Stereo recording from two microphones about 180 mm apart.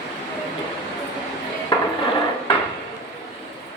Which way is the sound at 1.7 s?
25° left (ahead or behind).